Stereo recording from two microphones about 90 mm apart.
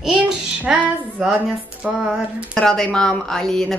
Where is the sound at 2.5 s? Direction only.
5° left (ahead or behind).